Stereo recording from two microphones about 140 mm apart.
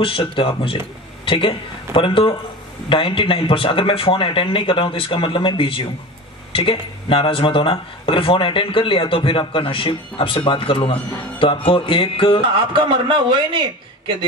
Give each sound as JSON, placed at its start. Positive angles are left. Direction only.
{"t": 0.0, "sound": "a man's voice", "side_deg": 40}
{"t": 12.7, "sound": "a man's voice", "side_deg": -35}